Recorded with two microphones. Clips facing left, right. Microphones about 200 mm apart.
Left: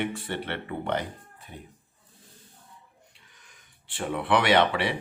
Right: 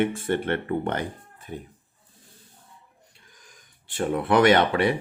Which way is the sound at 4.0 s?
45° right (ahead or behind).